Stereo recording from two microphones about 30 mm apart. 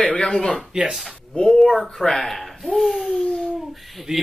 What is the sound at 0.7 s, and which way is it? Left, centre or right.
Speech, right.